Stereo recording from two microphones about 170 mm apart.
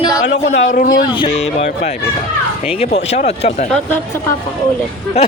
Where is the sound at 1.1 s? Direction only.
35° left (ahead or behind).